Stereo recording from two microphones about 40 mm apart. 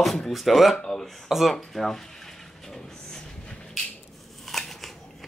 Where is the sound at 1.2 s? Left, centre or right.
Centre.